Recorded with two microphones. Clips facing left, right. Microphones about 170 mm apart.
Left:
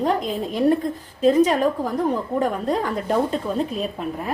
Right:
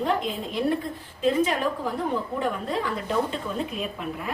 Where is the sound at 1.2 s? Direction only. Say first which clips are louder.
Left 6 dB; 40° left (ahead or behind).